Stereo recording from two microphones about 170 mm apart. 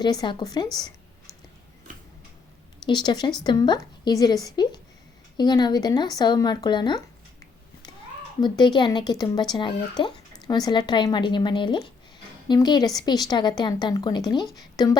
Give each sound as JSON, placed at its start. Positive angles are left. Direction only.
{"t": 0.0, "sound": "a woman's voice", "side_deg": 25}
{"t": 2.8, "sound": "a woman's voice", "side_deg": 25}
{"t": 8.4, "sound": "a woman's voice", "side_deg": 25}